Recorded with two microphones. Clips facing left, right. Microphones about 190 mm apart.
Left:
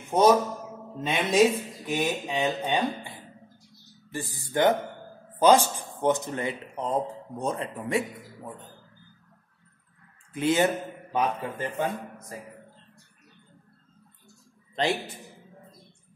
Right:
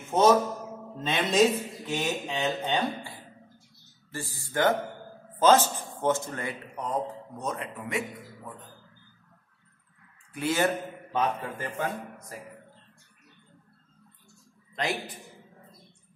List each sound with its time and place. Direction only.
0.1 s a man's voice: 10° left (ahead or behind)
4.1 s a man's voice: 15° left (ahead or behind)
10.3 s a man's voice: 20° left (ahead or behind)